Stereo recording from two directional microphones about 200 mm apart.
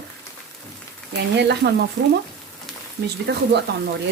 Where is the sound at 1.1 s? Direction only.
55° right (ahead or behind).